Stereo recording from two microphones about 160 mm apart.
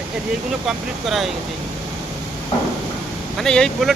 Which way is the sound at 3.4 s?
5° left (ahead or behind).